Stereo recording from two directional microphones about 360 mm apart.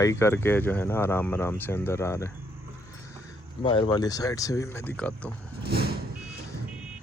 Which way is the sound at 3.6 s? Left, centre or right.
Centre.